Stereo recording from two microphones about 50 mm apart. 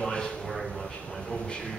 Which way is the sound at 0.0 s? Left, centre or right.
Centre.